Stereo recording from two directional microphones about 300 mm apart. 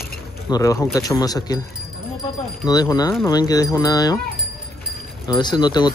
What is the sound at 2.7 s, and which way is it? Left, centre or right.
Speech, centre.